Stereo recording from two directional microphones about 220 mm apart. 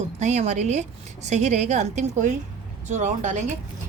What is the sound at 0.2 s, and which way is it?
A woman's voice, 30° right (ahead or behind).